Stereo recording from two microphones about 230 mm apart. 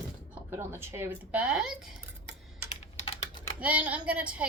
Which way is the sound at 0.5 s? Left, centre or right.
Centre.